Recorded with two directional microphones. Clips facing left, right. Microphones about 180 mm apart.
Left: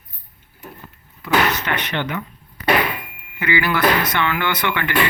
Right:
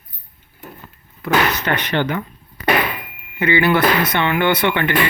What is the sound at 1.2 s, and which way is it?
Speech, 35° right (ahead or behind).